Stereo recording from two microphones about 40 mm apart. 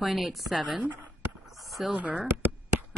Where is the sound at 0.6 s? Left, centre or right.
Right.